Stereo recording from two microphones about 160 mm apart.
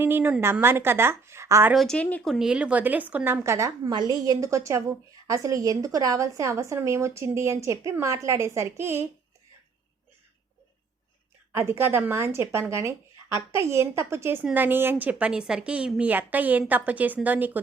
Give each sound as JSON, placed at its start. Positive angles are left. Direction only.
{"t": 0.0, "sound": "a woman's voice", "side_deg": -15}
{"t": 1.7, "sound": "a woman's voice", "side_deg": 0}
{"t": 11.5, "sound": "a woman's voice", "side_deg": -15}